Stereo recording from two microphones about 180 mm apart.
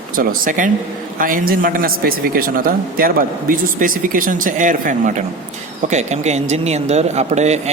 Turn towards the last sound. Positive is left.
turn(degrees=-40)  # may be behind; listen again after turning